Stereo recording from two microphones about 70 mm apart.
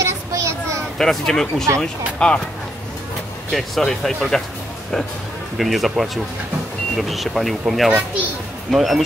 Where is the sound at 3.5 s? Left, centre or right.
Centre.